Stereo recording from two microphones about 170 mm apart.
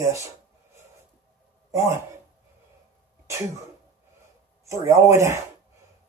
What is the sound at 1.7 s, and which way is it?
Speech, 15° right (ahead or behind).